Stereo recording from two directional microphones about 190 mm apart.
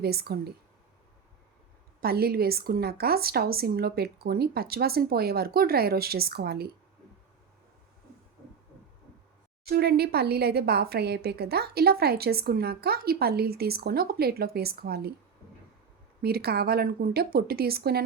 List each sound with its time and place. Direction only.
0.0 s speech: 55° right (ahead or behind)
2.0 s a woman's voice: 55° right (ahead or behind)
9.6 s speech: 55° right (ahead or behind)
16.2 s speech: 55° right (ahead or behind)